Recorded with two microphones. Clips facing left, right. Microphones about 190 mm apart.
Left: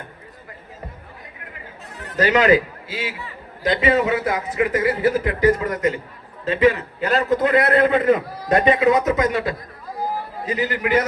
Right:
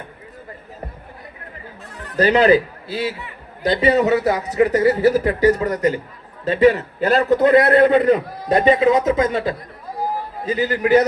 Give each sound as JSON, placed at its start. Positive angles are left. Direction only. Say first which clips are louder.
{"t": 2.1, "sound": "a man's voice", "louder": "right 2 dB", "side_deg": -35}